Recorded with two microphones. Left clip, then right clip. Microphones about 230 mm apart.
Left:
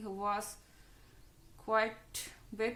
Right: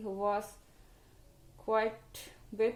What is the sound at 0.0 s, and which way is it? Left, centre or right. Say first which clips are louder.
Speech: right 3 dB; left.